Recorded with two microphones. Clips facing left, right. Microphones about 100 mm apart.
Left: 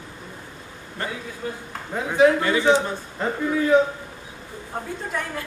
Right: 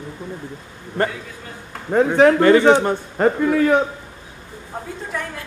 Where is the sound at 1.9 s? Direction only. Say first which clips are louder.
Right 5 dB; 60° right (ahead or behind).